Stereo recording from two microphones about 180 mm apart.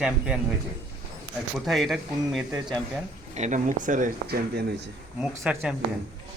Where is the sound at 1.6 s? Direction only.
Centre (ahead or behind).